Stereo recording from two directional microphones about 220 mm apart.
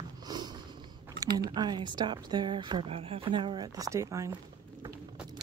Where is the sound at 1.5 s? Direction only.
20° right (ahead or behind).